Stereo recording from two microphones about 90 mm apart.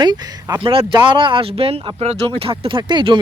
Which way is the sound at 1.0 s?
60° right (ahead or behind).